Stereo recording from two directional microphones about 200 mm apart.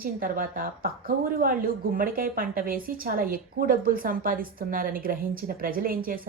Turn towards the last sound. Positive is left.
turn(degrees=-45)  # may be behind; listen again after turning